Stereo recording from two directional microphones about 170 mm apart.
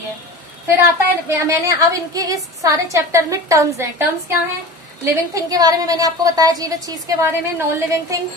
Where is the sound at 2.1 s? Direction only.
20° right (ahead or behind).